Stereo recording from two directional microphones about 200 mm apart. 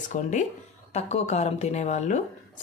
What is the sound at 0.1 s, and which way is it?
Speech, 40° left (ahead or behind).